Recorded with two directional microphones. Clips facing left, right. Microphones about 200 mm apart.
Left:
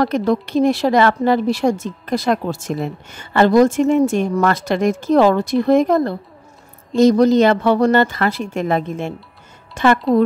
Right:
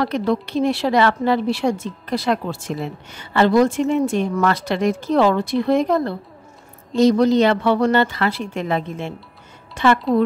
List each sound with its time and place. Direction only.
0.0 s a woman's voice: 45° left (ahead or behind)